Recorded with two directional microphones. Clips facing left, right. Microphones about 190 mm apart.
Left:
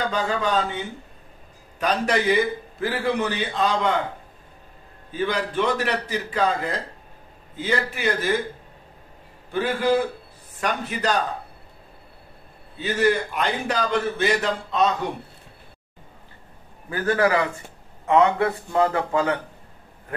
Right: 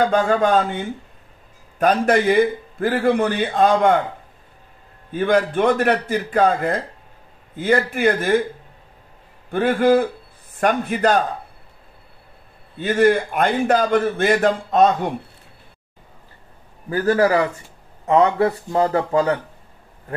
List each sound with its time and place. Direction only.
0.0 s a man's voice: 50° right (ahead or behind)
5.1 s a man's voice: 50° right (ahead or behind)
9.5 s a man's voice: 50° right (ahead or behind)
12.7 s a man's voice: 50° right (ahead or behind)
16.9 s speech: 35° right (ahead or behind)